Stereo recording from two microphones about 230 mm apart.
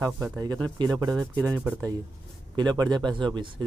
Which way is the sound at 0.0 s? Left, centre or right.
Centre.